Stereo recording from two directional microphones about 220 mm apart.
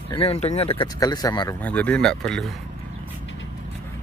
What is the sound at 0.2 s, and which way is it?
Speech, 30° left (ahead or behind).